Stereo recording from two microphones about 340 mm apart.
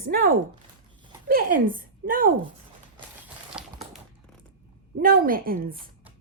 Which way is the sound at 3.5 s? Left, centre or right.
Centre.